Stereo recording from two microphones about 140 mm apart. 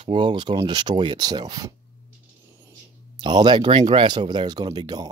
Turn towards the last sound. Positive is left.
turn(degrees=-30)  # may be behind; listen again after turning